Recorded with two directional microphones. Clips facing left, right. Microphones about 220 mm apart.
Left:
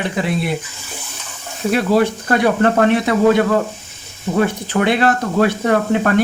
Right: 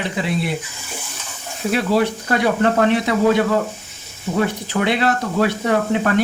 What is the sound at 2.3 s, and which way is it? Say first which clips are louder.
Speech: left 3 dB; 50° left (ahead or behind).